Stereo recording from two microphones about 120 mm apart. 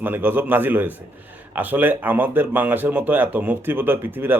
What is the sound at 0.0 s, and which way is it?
Speech, 15° right (ahead or behind).